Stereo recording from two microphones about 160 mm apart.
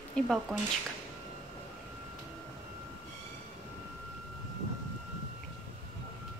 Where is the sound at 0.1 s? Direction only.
Centre (ahead or behind).